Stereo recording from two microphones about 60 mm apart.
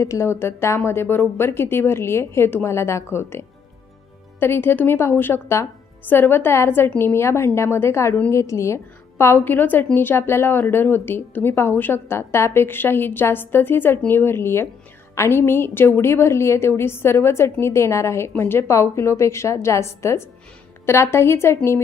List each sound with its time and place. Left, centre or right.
0.0 s a woman's voice: left
2.7 s a woman's voice: left